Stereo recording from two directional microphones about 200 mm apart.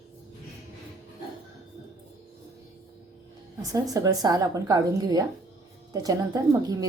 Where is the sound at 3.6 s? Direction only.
20° right (ahead or behind).